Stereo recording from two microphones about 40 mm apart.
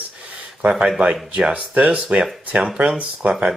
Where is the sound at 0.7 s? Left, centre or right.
Right.